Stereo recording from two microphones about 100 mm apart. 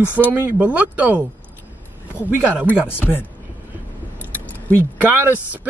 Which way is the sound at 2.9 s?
20° left (ahead or behind).